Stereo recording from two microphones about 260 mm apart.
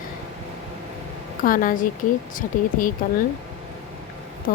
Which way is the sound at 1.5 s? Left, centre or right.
Left.